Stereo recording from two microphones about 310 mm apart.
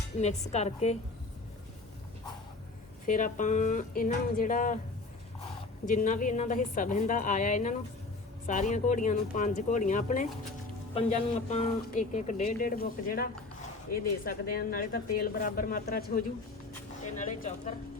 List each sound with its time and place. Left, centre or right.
0.2 s speech: left
3.1 s speech: left
5.9 s speech: left